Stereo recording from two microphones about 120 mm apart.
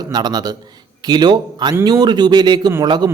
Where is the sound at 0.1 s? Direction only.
35° right (ahead or behind).